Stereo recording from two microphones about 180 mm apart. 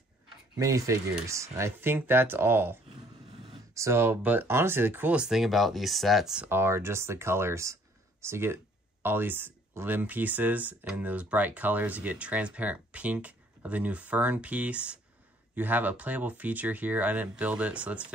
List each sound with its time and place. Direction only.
0.6 s speech: 20° right (ahead or behind)